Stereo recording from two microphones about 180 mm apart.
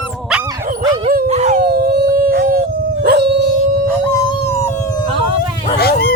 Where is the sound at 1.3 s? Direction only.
40° right (ahead or behind).